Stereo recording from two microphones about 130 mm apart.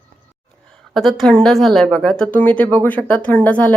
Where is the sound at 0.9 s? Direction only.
Centre (ahead or behind).